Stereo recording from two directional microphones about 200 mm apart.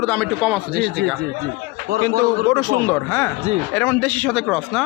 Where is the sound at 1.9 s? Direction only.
55° right (ahead or behind).